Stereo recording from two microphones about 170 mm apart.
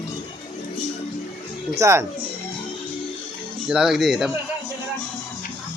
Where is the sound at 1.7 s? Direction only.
15° right (ahead or behind).